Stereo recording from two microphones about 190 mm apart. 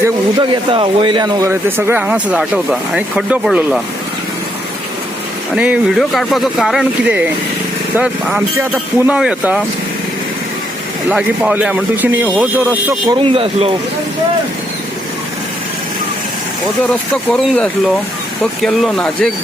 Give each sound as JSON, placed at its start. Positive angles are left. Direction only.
{"t": 0.0, "sound": "speech", "side_deg": -25}
{"t": 5.5, "sound": "speech", "side_deg": -5}
{"t": 11.1, "sound": "speech", "side_deg": -5}
{"t": 13.1, "sound": "speech", "side_deg": -30}
{"t": 17.3, "sound": "speech", "side_deg": 5}